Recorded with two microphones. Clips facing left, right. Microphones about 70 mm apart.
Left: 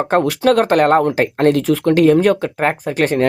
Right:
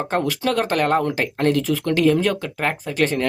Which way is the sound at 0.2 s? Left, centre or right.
Left.